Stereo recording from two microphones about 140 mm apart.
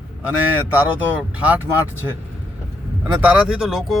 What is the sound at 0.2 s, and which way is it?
A man's voice, 10° right (ahead or behind).